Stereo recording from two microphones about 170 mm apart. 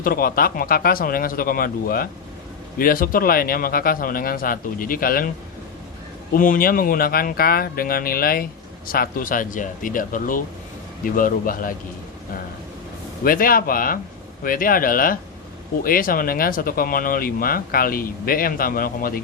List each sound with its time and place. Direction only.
0.0 s speech: 60° left (ahead or behind)
6.3 s speech: 55° left (ahead or behind)
13.2 s speech: 55° left (ahead or behind)